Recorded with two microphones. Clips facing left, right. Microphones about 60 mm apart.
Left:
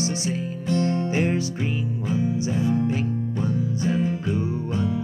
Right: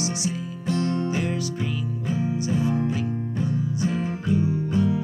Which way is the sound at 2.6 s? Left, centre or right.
Right.